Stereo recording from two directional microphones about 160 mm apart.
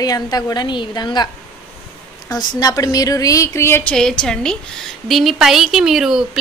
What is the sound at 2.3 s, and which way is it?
A woman's voice, 25° left (ahead or behind).